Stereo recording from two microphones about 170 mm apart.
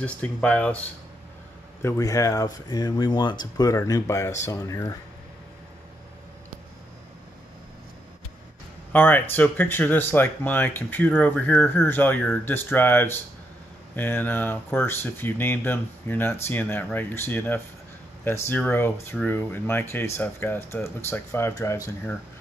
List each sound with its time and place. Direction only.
0.0 s speech: 5° left (ahead or behind)
8.9 s speech: 10° left (ahead or behind)